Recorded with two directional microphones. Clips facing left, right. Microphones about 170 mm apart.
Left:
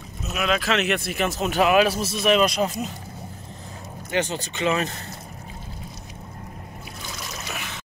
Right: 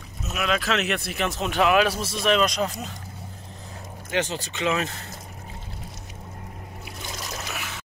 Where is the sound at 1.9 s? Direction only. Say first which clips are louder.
Left 3 dB; 25° left (ahead or behind).